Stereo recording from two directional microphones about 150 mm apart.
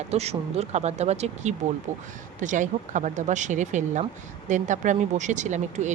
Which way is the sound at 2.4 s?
55° right (ahead or behind).